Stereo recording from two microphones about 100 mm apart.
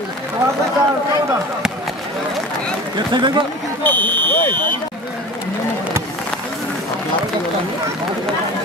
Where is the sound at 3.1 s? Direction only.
50° right (ahead or behind).